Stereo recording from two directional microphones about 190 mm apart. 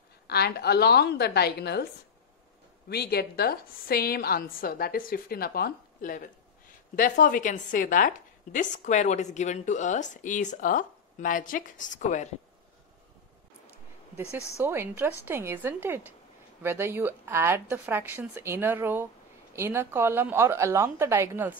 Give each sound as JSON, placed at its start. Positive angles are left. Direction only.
{"t": 0.3, "sound": "a woman's voice", "side_deg": 55}
{"t": 2.9, "sound": "a woman's voice", "side_deg": 55}
{"t": 14.6, "sound": "a woman's voice", "side_deg": -10}